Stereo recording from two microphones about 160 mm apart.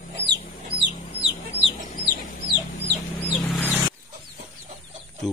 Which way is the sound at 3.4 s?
5° left (ahead or behind).